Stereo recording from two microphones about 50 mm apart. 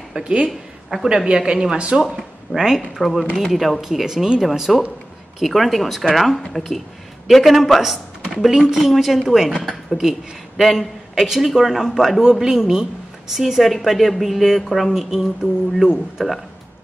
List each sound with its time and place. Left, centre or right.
0.2 s a woman's voice: right
0.5 s a sound: centre
1.0 s speech: centre
3.0 s a woman's voice: centre